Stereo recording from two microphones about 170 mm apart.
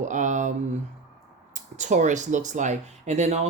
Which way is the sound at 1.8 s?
45° right (ahead or behind).